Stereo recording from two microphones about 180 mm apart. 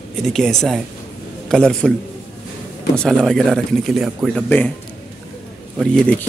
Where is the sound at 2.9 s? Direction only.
5° left (ahead or behind).